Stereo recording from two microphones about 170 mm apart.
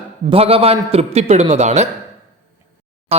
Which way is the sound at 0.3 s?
35° right (ahead or behind).